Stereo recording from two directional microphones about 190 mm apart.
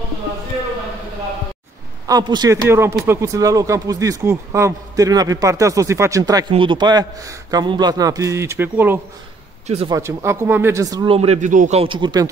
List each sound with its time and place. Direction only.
2.0 s a man's voice: 20° right (ahead or behind)
11.1 s speech: 35° right (ahead or behind)